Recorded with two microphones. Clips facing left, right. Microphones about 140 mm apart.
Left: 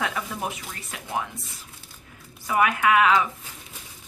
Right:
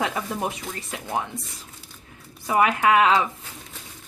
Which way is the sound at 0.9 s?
25° right (ahead or behind).